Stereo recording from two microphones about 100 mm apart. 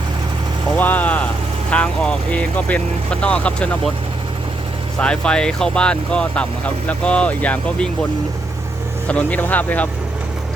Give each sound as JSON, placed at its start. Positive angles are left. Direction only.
{"t": 0.8, "sound": "vehicle", "side_deg": 15}
{"t": 1.7, "sound": "speech", "side_deg": 10}
{"t": 4.9, "sound": "speech", "side_deg": 10}
{"t": 9.0, "sound": "speech", "side_deg": 15}